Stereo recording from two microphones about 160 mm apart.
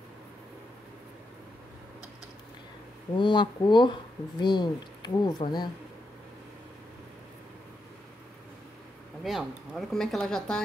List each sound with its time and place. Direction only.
3.2 s speech: 30° left (ahead or behind)
9.2 s speech: centre (ahead or behind)